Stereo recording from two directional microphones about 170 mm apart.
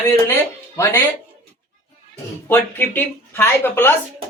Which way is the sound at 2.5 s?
10° left (ahead or behind).